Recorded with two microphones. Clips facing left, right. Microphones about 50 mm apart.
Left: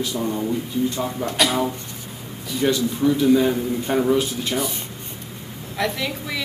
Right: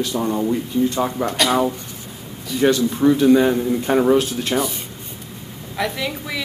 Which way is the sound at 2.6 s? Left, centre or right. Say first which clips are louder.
Right 4 dB; right.